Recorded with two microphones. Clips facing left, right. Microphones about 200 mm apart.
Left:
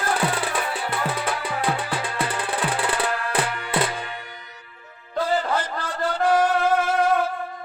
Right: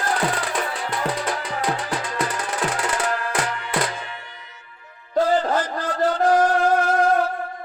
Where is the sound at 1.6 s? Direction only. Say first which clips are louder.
Even; 30° left (ahead or behind).